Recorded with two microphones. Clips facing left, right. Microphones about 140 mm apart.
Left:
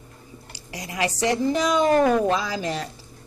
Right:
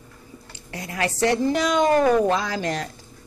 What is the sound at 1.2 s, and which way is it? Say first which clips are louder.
Speech: right 2 dB; 35° right (ahead or behind).